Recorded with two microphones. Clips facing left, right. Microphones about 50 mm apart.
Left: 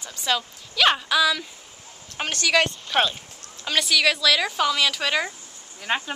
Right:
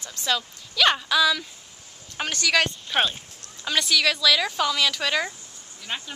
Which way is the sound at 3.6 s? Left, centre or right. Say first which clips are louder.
Left 1 dB; centre.